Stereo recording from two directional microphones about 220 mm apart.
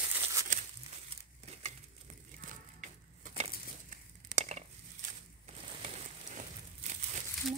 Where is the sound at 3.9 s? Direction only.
35° right (ahead or behind).